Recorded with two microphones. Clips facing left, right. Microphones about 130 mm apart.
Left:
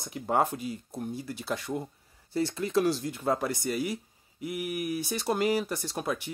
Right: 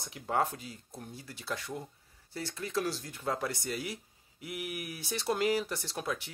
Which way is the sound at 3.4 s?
10° left (ahead or behind).